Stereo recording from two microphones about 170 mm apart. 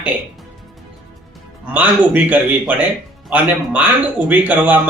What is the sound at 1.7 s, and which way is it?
Speech, 10° right (ahead or behind).